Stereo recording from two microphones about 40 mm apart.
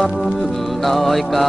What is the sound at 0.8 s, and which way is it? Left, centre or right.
Music, centre.